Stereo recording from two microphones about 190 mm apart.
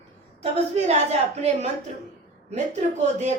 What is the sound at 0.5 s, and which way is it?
Speech, 35° right (ahead or behind).